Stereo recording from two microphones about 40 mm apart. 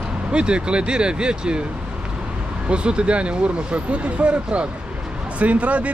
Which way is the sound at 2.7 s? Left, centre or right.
Right.